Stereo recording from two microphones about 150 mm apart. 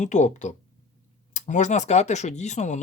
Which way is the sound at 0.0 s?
50° left (ahead or behind).